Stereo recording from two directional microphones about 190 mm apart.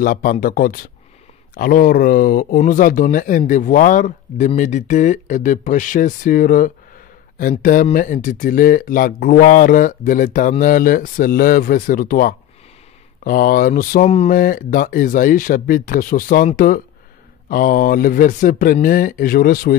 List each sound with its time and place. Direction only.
0.0 s speech: 45° left (ahead or behind)
14.0 s speech: 35° left (ahead or behind)
14.3 s speech: 50° left (ahead or behind)